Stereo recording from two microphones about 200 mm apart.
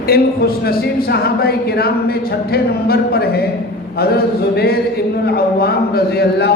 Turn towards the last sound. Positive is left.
turn(degrees=55)  # may be behind; listen again after turning